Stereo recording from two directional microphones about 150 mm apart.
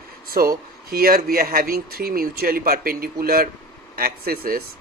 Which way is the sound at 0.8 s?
85° right.